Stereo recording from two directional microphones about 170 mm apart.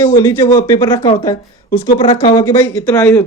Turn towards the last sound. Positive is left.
turn(degrees=15)  # may be behind; listen again after turning